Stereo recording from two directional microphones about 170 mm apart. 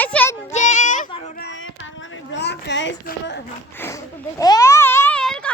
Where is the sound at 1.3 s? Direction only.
80° left.